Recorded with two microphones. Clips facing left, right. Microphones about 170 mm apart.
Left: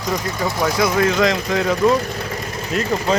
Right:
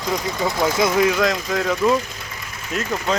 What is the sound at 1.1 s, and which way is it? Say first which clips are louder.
Speech: left 3 dB; centre (ahead or behind).